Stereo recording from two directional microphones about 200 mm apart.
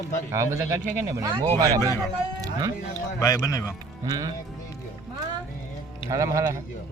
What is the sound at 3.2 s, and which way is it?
Speech, 20° left (ahead or behind).